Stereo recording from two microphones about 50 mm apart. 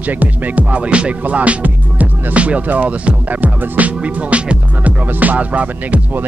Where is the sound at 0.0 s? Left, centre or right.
Right.